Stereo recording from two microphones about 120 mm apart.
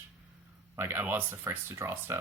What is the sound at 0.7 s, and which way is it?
Speech, 20° right (ahead or behind).